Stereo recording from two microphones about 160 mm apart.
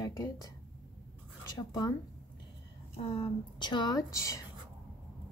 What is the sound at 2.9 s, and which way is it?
A woman's voice, 35° left (ahead or behind).